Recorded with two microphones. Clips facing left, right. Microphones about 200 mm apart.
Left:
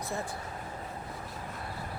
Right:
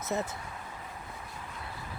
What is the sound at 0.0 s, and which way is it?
Speech, 20° right (ahead or behind).